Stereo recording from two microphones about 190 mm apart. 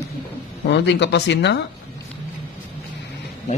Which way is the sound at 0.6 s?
65° left (ahead or behind).